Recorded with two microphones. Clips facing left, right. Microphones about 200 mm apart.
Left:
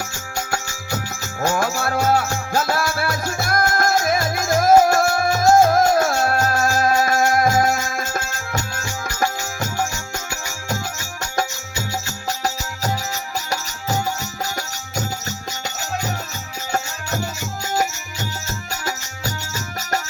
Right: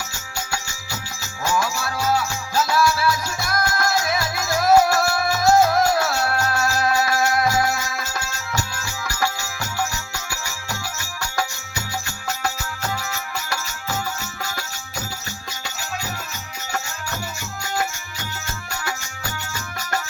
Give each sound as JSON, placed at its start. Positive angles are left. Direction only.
{"t": 0.3, "sound": "music", "side_deg": 50}
{"t": 13.5, "sound": "music", "side_deg": 40}